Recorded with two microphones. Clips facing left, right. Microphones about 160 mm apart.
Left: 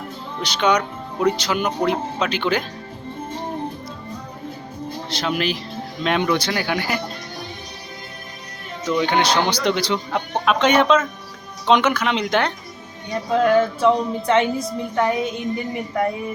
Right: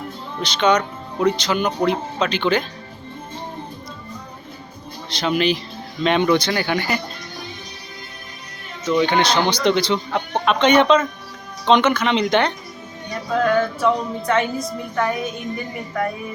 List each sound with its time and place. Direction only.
0.4 s speech: 10° left (ahead or behind)
5.0 s speech: 5° left (ahead or behind)
8.9 s speech: 5° left (ahead or behind)
13.3 s a woman's voice: 25° left (ahead or behind)